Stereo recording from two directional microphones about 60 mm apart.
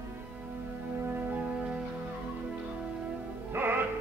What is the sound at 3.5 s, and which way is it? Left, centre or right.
Music, right.